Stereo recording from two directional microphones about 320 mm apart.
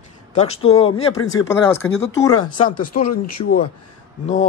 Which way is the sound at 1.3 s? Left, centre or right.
Centre.